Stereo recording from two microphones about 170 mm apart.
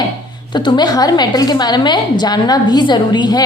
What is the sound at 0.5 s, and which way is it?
A woman's voice, 25° left (ahead or behind).